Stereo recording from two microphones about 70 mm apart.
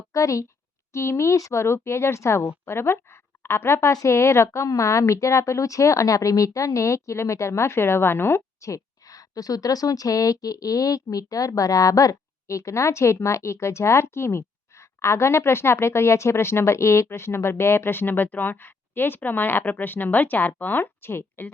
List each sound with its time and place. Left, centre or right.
0.1 s a woman's voice: left
8.7 s speech: left